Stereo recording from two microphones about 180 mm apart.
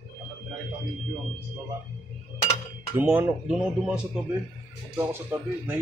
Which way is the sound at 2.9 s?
5° right (ahead or behind).